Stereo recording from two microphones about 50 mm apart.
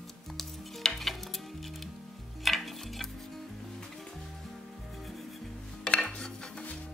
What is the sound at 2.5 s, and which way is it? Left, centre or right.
Dishes, centre.